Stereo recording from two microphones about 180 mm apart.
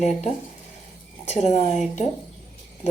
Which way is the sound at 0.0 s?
40° left (ahead or behind).